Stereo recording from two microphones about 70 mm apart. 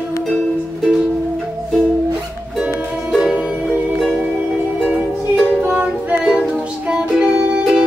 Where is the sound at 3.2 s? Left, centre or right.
Centre; by 6.2 s right.